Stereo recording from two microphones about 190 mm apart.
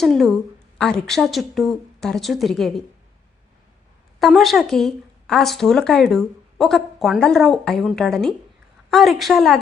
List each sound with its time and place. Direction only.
0.0 s a woman's voice: centre (ahead or behind)
4.2 s a woman's voice: centre (ahead or behind)